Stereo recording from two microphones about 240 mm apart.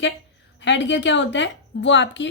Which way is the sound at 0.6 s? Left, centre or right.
Left.